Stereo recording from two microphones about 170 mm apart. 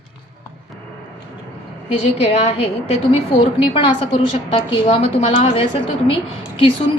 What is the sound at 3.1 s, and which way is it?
A woman's voice, 30° left (ahead or behind).